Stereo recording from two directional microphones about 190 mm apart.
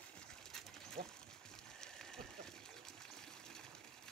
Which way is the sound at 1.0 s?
45° right (ahead or behind).